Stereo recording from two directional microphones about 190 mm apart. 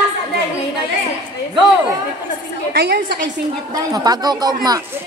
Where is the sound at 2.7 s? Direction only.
55° right (ahead or behind).